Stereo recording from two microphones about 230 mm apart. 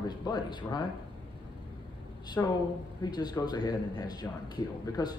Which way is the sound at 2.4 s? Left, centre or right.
Centre.